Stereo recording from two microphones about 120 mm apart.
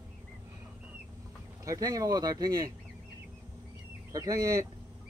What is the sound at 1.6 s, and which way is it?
Speech, 30° right (ahead or behind).